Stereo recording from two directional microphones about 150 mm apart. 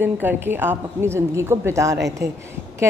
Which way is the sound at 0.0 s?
15° right (ahead or behind).